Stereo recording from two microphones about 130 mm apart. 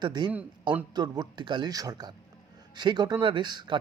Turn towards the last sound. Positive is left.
turn(degrees=-35)  # may be behind; listen again after turning